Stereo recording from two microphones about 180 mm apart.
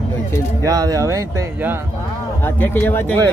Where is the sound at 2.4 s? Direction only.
10° left (ahead or behind).